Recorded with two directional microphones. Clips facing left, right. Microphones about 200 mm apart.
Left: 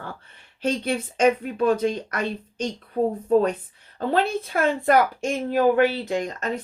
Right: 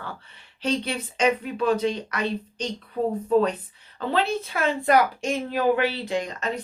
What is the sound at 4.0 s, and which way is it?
Speech, 50° left (ahead or behind).